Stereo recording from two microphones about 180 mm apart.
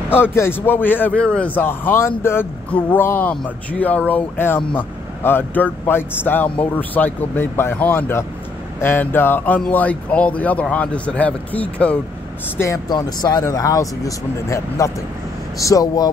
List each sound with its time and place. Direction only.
0.1 s a man's voice: 10° left (ahead or behind)
12.5 s speech: 20° left (ahead or behind)